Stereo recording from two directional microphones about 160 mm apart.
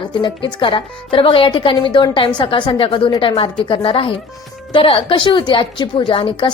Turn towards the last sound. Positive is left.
turn(degrees=30)  # may be behind; listen again after turning